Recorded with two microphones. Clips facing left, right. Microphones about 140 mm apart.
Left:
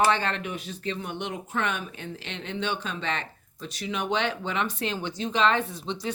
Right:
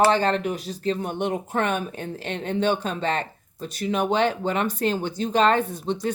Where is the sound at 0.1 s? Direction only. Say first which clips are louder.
Right 6 dB; 35° right (ahead or behind).